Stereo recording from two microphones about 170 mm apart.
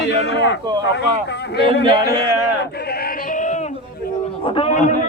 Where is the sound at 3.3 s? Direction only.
45° left (ahead or behind).